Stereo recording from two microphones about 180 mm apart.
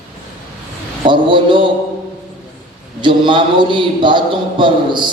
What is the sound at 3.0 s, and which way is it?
A man's voice, 25° right (ahead or behind).